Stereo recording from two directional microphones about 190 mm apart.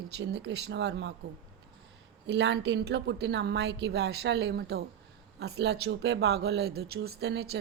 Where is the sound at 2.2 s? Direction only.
65° right (ahead or behind).